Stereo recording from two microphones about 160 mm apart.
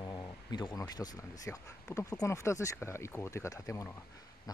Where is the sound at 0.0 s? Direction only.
25° left (ahead or behind).